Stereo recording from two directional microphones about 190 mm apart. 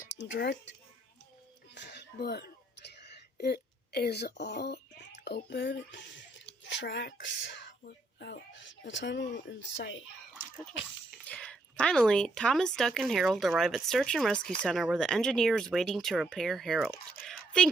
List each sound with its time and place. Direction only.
0.1 s speech: 65° left (ahead or behind)
1.7 s throat clearing: 65° left (ahead or behind)
5.2 s speech: 60° left (ahead or behind)
11.3 s speech: 5° left (ahead or behind)